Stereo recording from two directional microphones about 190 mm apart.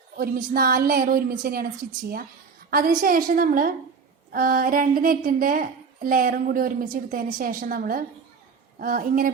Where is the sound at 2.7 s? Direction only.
50° right (ahead or behind).